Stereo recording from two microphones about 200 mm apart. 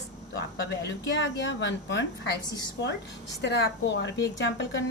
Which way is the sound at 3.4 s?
65° left (ahead or behind).